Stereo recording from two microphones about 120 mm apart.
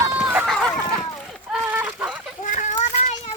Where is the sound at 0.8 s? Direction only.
35° left (ahead or behind).